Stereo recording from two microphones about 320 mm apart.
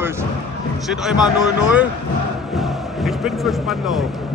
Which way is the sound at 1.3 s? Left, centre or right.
Centre.